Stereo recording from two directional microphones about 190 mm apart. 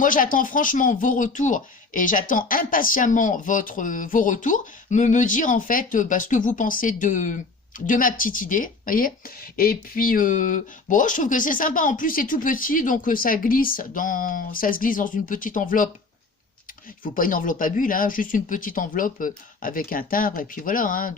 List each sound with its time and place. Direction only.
0.0 s speech: 45° left (ahead or behind)
17.0 s speech: 45° left (ahead or behind)